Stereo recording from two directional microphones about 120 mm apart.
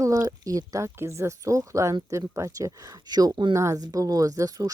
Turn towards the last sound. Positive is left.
turn(degrees=-30)  # may be behind; listen again after turning